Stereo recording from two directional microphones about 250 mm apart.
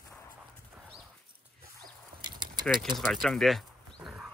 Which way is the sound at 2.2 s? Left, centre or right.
Centre.